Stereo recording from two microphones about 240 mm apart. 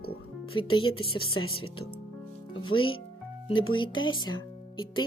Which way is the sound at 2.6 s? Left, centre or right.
Left.